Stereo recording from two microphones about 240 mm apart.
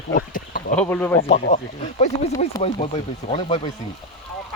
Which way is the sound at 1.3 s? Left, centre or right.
Left.